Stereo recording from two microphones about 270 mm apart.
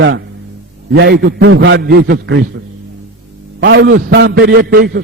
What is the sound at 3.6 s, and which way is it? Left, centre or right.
A man's voice, right.